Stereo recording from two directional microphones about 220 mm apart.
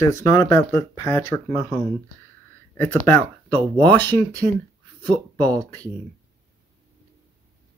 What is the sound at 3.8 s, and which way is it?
Speech, 10° left (ahead or behind).